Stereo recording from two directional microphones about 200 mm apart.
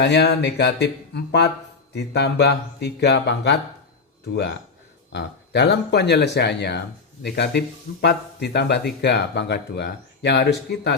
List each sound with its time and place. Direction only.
0.0 s speech: 55° left (ahead or behind)